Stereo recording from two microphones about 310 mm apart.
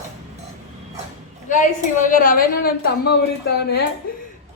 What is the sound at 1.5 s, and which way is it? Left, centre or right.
A woman's voice, left.